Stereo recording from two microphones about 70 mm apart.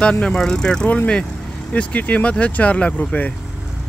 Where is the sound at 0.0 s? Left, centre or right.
Centre.